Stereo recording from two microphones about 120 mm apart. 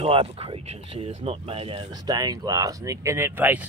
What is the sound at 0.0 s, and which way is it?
Speech, 50° right (ahead or behind).